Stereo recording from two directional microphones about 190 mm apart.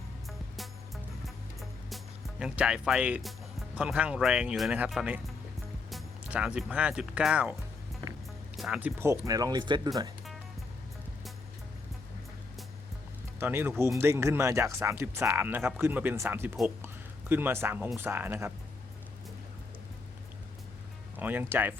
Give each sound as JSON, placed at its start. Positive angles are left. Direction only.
{"t": 0.3, "sound": "music", "side_deg": 0}
{"t": 2.4, "sound": "speech", "side_deg": -5}
{"t": 8.5, "sound": "speech", "side_deg": 0}
{"t": 13.4, "sound": "speech", "side_deg": -10}
{"t": 21.2, "sound": "speech", "side_deg": -10}